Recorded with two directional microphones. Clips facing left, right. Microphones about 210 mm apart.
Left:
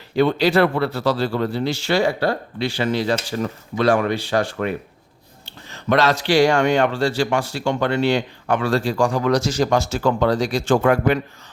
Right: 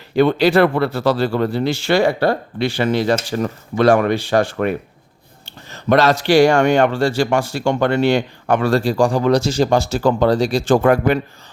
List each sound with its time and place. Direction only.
0.2 s speech: 55° right (ahead or behind)
5.7 s speech: 40° right (ahead or behind)